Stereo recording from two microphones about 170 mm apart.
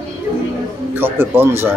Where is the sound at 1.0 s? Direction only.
15° right (ahead or behind).